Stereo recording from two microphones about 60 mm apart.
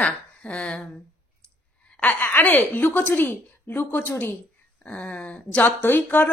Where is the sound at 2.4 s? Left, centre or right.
Left.